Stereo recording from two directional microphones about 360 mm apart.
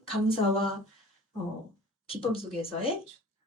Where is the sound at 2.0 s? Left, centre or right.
Centre.